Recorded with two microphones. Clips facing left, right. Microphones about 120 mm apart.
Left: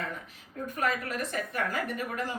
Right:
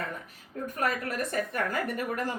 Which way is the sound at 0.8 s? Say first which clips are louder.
Right 1 dB; 45° right (ahead or behind).